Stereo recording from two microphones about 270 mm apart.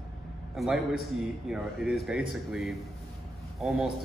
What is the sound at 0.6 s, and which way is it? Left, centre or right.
Speech, centre.